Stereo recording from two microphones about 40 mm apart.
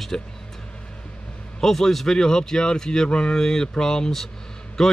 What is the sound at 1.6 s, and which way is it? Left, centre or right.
A man's voice, centre.